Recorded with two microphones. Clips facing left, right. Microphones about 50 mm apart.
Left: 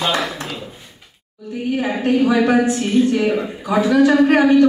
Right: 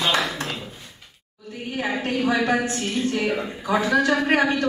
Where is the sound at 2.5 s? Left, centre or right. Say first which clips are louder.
Left 7 dB; centre.